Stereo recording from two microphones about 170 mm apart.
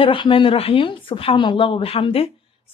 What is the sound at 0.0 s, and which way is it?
A woman's voice, 30° left (ahead or behind).